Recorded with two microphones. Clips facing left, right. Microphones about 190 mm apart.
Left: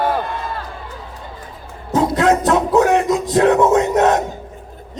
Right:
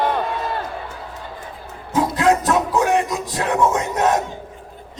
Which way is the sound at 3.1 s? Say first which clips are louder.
Left 9 dB; 25° left (ahead or behind).